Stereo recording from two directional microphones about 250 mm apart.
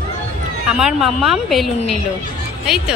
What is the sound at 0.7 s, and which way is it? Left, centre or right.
A woman's voice, centre.